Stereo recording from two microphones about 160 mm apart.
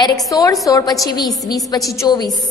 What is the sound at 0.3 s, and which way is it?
A woman's voice, 20° left (ahead or behind).